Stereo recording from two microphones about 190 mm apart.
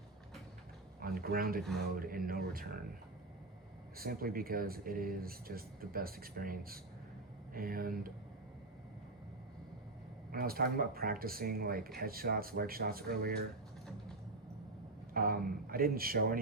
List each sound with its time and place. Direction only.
0.9 s speech: 50° right (ahead or behind)
3.9 s speech: 50° right (ahead or behind)
10.3 s speech: 50° right (ahead or behind)
15.1 s speech: 50° right (ahead or behind)